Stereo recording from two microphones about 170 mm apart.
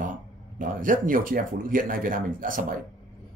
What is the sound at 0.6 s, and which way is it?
Speech, 50° right (ahead or behind).